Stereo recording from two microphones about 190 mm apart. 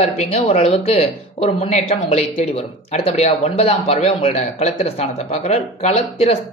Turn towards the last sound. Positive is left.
turn(degrees=35)  # may be behind; listen again after turning